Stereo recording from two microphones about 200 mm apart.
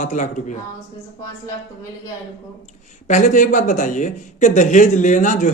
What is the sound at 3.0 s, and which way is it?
Speech, 35° left (ahead or behind).